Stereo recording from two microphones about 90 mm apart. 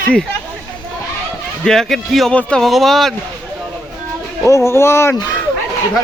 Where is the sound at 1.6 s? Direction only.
5° left (ahead or behind).